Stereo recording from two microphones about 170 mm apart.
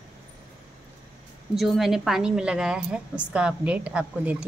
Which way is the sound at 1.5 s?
Centre (ahead or behind).